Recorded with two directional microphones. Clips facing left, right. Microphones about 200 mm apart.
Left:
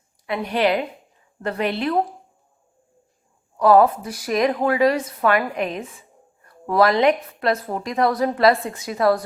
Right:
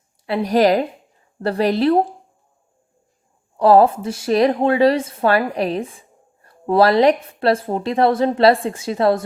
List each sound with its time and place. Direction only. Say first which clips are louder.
0.3 s a woman's voice: right 5 dB; 40° right (ahead or behind)
3.6 s a woman's voice: right 2 dB; 30° right (ahead or behind)